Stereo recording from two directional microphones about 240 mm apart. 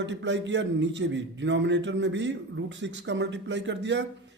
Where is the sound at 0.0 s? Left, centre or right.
Right.